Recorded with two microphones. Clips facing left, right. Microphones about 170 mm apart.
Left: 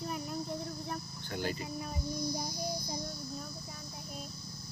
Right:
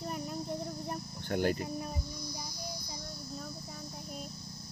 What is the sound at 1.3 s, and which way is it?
Cricket, 55° right (ahead or behind).